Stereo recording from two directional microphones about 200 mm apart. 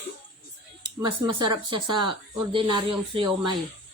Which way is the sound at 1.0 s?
25° right (ahead or behind).